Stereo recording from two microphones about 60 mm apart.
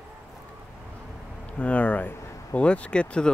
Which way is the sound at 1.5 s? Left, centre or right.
Left.